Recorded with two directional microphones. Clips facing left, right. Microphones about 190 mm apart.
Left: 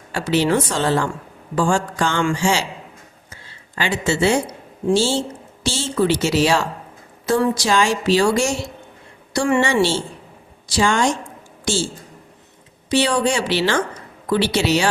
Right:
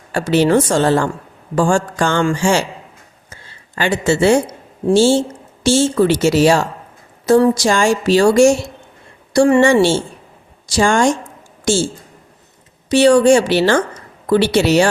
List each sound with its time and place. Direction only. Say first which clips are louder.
0.1 s a woman's voice: right 5 dB; 45° right (ahead or behind)
3.8 s a woman's voice: right 5 dB; 50° right (ahead or behind)
12.9 s a woman's voice: right 9 dB; 45° right (ahead or behind)